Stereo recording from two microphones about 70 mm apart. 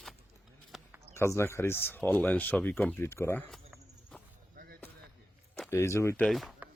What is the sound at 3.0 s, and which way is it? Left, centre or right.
Speech, left.